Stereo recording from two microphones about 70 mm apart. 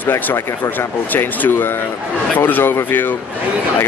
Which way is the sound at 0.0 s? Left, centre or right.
Left.